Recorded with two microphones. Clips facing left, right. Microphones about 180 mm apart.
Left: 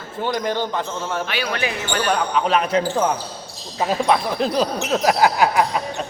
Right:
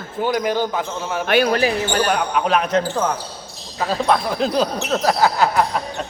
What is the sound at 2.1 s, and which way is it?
Speech, 5° right (ahead or behind).